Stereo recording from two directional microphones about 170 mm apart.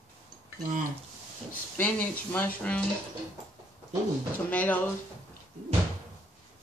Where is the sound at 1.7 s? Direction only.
10° left (ahead or behind).